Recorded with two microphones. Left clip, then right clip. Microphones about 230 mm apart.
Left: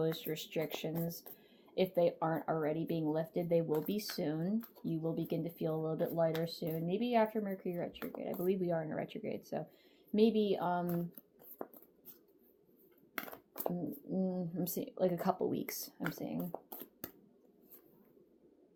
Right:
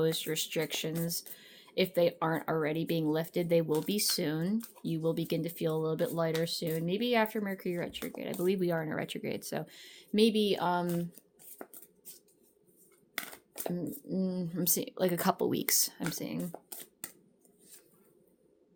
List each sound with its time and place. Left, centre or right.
0.0 s speech: right
4.5 s speech: centre
4.9 s speech: right
13.7 s speech: right
16.5 s shuffling cards: centre